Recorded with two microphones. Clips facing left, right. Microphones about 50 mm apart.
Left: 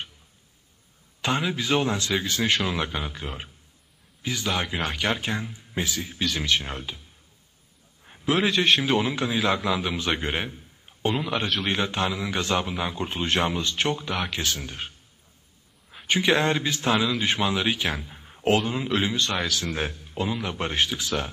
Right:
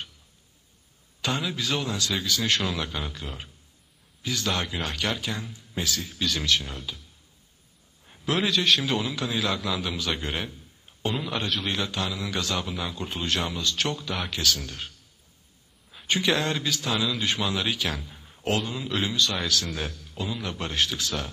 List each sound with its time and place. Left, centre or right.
1.2 s a man's voice: left
2.4 s a man's voice: centre
5.0 s a man's voice: left
8.0 s a sound: left
8.5 s a man's voice: left
11.1 s a man's voice: centre
11.7 s a man's voice: left
15.9 s a sound: centre
16.3 s a man's voice: left